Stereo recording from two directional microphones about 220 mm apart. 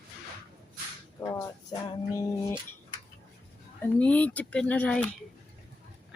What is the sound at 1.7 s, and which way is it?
Music, 20° left (ahead or behind).